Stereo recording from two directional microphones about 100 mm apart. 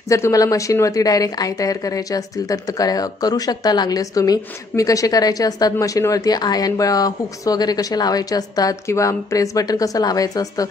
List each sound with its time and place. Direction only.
0.1 s a woman's voice: 35° left (ahead or behind)